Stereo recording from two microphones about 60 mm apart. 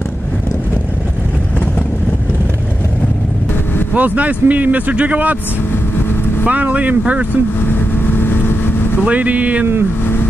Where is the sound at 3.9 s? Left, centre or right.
Right.